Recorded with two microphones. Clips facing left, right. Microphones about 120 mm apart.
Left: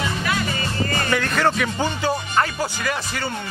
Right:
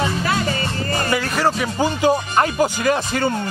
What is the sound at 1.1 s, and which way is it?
Speech, 5° right (ahead or behind).